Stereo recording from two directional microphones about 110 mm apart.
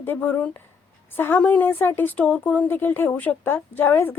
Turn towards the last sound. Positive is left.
turn(degrees=20)  # may be behind; listen again after turning